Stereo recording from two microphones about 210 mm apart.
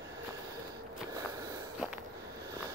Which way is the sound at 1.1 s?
15° right (ahead or behind).